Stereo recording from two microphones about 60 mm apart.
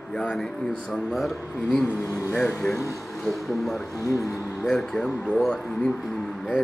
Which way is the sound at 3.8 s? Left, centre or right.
Left.